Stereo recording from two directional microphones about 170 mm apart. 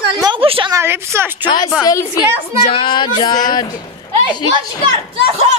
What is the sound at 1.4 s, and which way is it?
A woman's voice, 25° left (ahead or behind).